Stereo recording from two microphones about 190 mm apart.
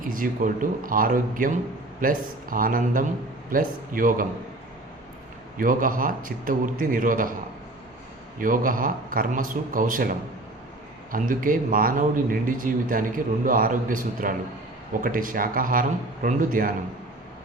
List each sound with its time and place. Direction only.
0.0 s speech: 45° right (ahead or behind)
5.5 s speech: 45° right (ahead or behind)
8.4 s speech: 45° right (ahead or behind)
11.1 s speech: 45° right (ahead or behind)